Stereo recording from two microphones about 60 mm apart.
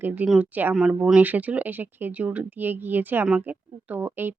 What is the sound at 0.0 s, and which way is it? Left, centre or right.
Speech, right.